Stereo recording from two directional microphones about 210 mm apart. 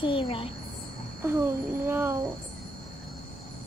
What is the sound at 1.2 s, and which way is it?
Speech, 10° right (ahead or behind).